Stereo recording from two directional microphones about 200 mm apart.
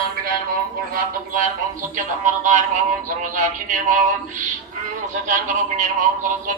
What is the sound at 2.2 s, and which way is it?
Speech, 40° right (ahead or behind).